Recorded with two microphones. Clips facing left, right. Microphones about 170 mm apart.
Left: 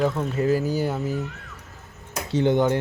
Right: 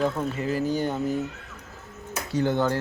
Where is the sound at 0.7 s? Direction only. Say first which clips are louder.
Left 1 dB; 5° left (ahead or behind).